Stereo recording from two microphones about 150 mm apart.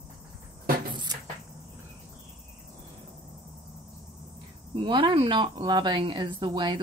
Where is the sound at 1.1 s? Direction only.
25° right (ahead or behind).